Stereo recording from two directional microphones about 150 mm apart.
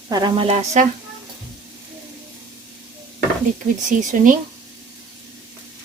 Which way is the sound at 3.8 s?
60° right (ahead or behind).